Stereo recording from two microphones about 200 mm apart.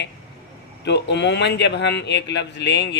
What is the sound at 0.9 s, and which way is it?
Speech, 60° left (ahead or behind).